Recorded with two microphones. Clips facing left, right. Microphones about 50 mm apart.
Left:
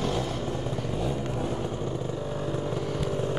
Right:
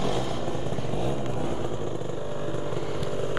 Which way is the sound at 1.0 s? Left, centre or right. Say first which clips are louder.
Right 1 dB; right.